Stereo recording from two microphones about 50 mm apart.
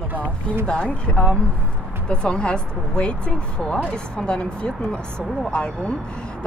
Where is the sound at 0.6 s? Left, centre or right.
Centre.